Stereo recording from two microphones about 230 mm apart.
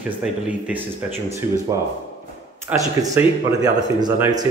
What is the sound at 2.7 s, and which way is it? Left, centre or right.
Speech, centre.